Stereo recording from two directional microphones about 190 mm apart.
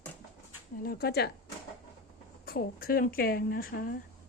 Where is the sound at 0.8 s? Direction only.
55° left (ahead or behind).